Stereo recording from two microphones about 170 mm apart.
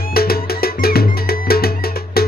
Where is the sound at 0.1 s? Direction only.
65° left (ahead or behind).